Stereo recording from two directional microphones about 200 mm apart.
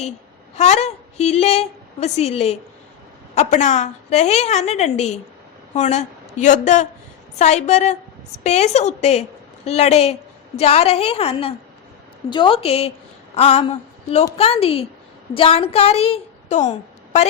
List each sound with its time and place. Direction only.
0.5 s a woman's voice: 35° left (ahead or behind)